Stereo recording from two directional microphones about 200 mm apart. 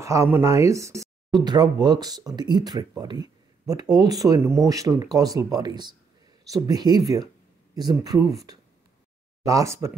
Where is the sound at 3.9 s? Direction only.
20° right (ahead or behind).